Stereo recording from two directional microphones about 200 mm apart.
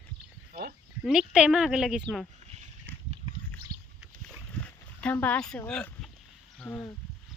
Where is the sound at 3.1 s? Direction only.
25° right (ahead or behind).